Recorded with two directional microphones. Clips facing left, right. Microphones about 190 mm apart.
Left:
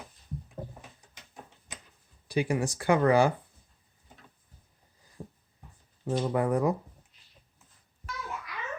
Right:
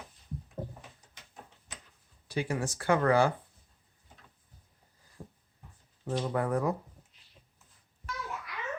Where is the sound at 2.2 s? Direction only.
15° left (ahead or behind).